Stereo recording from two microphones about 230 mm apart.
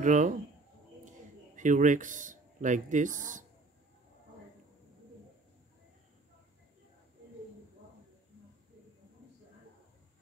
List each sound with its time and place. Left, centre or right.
0.0 s speech: right